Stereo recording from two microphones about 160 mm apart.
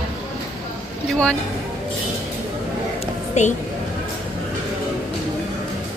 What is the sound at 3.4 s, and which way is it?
Speech, 45° left (ahead or behind).